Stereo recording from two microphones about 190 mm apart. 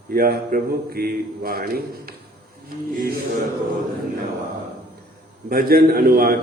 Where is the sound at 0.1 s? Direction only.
50° right (ahead or behind).